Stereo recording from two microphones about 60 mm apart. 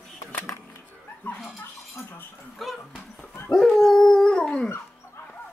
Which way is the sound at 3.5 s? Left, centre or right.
Centre.